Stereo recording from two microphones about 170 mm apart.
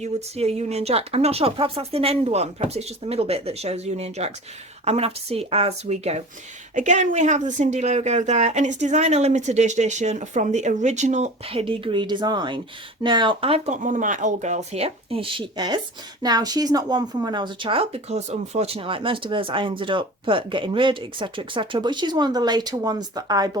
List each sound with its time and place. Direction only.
0.0 s a woman's voice: 40° right (ahead or behind); by 23.5 s 20° right (ahead or behind)